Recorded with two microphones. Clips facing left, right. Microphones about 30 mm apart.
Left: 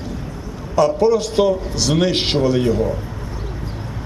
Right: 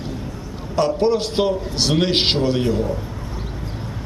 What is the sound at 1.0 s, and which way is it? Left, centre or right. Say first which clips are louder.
A man's voice: left 3 dB; right.